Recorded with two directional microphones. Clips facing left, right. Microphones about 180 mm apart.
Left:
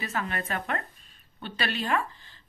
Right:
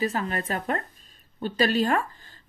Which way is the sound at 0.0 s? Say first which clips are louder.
Right 5 dB; 35° right (ahead or behind).